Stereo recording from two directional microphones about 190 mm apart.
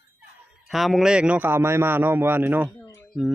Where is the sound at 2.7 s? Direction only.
15° left (ahead or behind).